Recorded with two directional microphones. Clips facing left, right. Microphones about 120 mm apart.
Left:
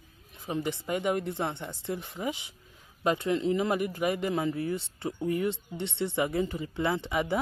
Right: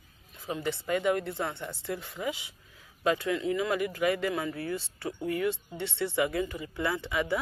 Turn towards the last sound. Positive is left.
turn(degrees=20)  # may be behind; listen again after turning